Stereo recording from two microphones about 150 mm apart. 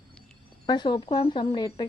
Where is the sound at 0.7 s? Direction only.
30° left (ahead or behind).